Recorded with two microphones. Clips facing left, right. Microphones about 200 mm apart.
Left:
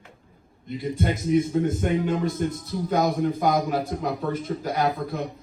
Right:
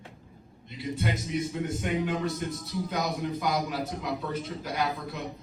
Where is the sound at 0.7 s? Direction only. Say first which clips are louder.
Left 6 dB; 50° left (ahead or behind).